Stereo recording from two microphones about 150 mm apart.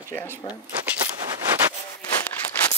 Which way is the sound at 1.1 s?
25° right (ahead or behind).